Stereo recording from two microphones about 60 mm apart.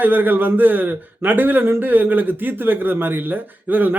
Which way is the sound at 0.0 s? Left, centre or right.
Right.